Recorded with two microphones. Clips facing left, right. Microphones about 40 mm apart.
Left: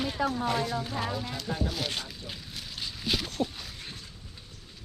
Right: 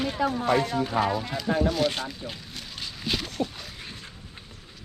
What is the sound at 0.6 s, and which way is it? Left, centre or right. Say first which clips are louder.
Speech: right 4 dB; right.